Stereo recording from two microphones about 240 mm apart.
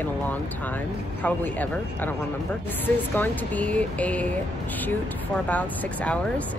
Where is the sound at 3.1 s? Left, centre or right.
Centre.